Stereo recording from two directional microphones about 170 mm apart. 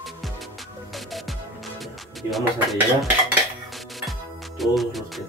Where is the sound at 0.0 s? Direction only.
Centre (ahead or behind).